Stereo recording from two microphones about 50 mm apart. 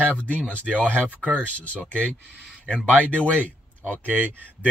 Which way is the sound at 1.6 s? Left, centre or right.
Left.